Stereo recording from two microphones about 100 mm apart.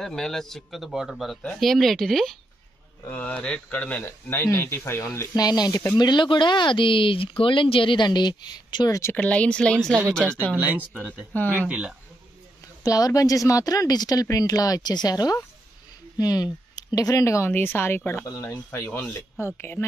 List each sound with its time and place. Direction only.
0.0 s speech: 5° left (ahead or behind); by 8.9 s 45° left (ahead or behind)
9.1 s speech: 15° left (ahead or behind)
10.5 s speech: 15° right (ahead or behind)
12.8 s speech: 35° left (ahead or behind)
17.5 s speech: 20° left (ahead or behind)
18.9 s speech: 10° left (ahead or behind)
19.3 s speech: 25° left (ahead or behind)